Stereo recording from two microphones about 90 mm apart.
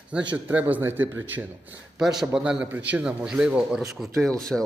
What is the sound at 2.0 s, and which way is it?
Speech, 5° right (ahead or behind).